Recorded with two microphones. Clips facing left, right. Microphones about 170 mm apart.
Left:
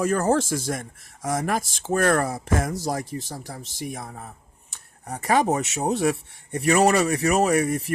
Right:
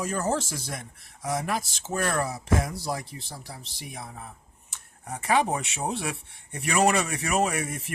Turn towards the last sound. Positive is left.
turn(degrees=40)  # may be behind; listen again after turning